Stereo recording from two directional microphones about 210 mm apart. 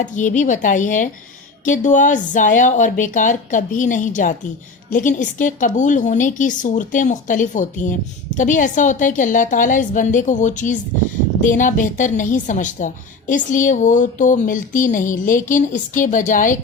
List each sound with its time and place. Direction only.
0.0 s a woman's voice: 35° left (ahead or behind)